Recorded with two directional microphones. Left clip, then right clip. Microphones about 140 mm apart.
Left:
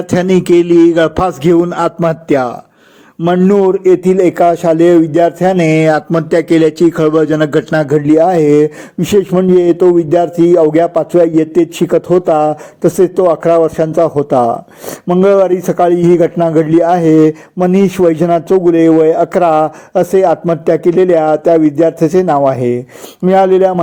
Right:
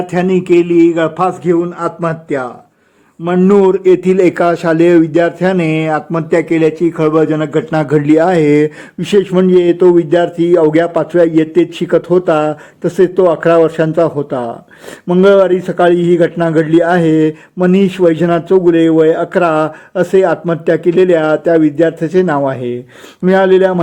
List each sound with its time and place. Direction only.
0.1 s a sound: 25° left (ahead or behind)
0.3 s a man's voice: 35° left (ahead or behind)
1.7 s a sound: 55° left (ahead or behind)
3.6 s a man's voice: 10° right (ahead or behind)
5.6 s speech: 15° left (ahead or behind)
5.9 s a man's voice: 30° left (ahead or behind)
7.9 s a man's voice: 5° left (ahead or behind)